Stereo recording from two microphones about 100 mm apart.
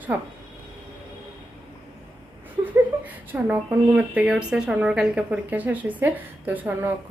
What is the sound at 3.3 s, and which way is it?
A woman's voice, 20° right (ahead or behind).